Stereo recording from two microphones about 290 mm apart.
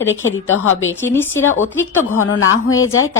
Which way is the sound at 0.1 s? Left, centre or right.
Left.